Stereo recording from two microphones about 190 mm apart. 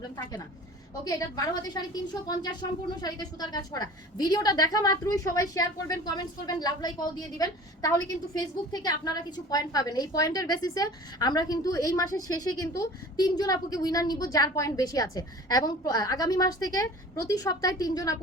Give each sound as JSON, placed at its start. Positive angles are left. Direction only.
{"t": 1.0, "sound": "a woman's voice", "side_deg": 20}